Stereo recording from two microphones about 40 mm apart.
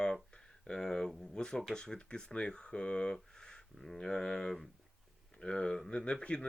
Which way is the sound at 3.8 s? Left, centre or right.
Centre.